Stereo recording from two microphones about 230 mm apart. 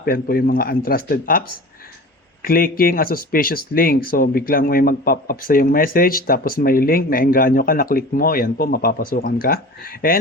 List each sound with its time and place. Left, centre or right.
0.0 s speech: left